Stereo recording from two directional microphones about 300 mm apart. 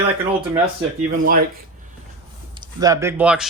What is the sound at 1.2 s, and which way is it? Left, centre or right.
Speech, right.